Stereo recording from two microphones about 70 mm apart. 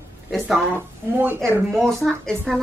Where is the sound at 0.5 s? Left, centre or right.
Right.